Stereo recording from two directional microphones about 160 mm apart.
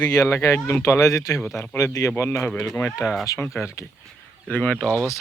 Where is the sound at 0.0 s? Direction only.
20° left (ahead or behind).